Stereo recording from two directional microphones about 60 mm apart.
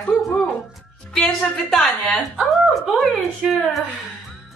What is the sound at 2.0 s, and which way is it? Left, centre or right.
A woman's voice, centre.